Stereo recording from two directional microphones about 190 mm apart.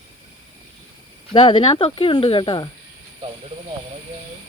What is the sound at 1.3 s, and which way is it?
Speech, 25° left (ahead or behind).